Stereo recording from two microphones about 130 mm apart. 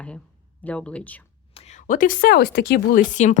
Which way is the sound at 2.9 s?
80° left.